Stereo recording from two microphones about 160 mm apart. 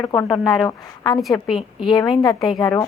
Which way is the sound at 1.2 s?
Centre (ahead or behind).